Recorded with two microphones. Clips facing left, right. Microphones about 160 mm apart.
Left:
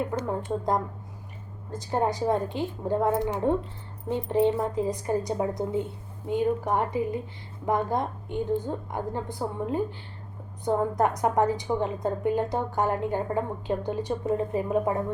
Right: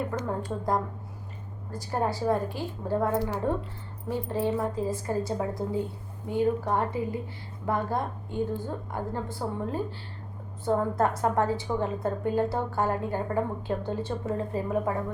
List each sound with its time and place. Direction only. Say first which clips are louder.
0.2 s a woman's voice: left 3 dB; 20° left (ahead or behind)